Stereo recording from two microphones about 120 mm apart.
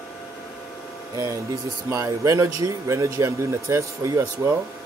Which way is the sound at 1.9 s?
25° right (ahead or behind).